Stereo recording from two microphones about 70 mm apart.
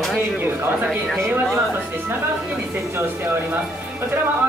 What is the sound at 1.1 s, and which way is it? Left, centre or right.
Speech, right.